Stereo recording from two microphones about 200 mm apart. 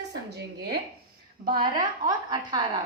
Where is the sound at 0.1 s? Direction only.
55° right (ahead or behind).